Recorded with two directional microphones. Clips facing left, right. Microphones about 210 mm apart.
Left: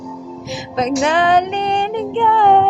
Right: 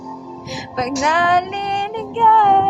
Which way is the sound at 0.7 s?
25° left (ahead or behind).